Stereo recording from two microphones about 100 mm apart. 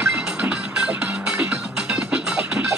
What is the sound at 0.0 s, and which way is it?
Music, 15° right (ahead or behind).